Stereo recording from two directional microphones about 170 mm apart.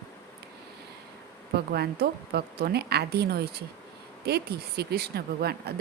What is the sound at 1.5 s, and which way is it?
Speech, 70° right (ahead or behind).